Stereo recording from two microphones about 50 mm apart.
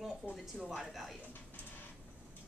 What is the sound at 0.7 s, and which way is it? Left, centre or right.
Speech, centre.